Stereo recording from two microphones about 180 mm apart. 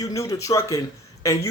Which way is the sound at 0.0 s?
20° left (ahead or behind).